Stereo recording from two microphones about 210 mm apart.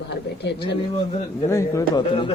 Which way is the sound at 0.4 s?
55° left (ahead or behind).